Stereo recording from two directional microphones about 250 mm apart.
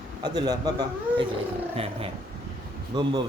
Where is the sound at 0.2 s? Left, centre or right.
Centre.